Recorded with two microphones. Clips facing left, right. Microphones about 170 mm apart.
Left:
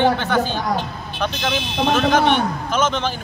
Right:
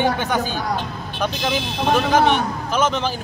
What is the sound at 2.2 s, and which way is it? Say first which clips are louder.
Speech: left 1 dB; 40° right (ahead or behind).